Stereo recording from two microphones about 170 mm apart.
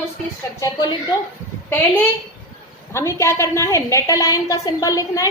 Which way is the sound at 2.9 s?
15° left (ahead or behind).